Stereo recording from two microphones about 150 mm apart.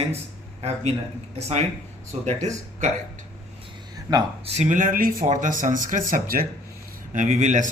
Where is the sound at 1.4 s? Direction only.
45° right (ahead or behind).